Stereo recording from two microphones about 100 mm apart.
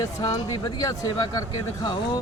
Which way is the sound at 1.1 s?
45° left (ahead or behind).